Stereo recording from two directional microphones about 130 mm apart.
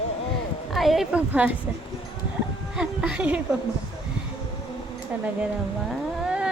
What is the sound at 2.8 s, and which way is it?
Music, 10° right (ahead or behind).